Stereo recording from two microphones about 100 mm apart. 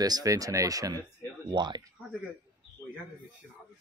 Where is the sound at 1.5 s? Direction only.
45° right (ahead or behind).